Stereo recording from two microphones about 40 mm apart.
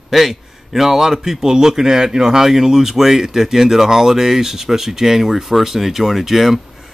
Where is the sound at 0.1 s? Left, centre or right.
Centre.